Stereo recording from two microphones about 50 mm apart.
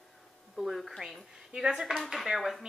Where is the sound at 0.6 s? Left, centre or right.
Centre.